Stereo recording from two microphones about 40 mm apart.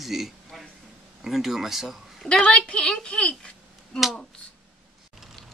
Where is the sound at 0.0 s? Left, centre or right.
Centre.